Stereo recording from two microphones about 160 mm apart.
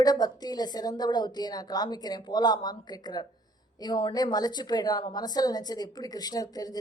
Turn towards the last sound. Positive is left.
turn(degrees=25)  # may be behind; listen again after turning